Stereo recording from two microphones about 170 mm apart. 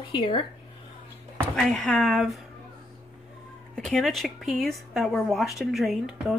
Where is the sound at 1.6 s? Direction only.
5° left (ahead or behind).